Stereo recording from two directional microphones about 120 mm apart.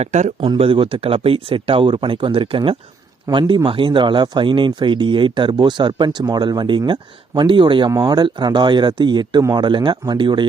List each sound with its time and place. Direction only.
0.0 s speech: 75° right (ahead or behind)
0.4 s speech: 45° right (ahead or behind)
7.9 s speech: 30° right (ahead or behind)